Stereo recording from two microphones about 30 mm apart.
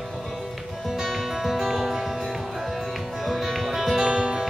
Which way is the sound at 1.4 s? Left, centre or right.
Centre.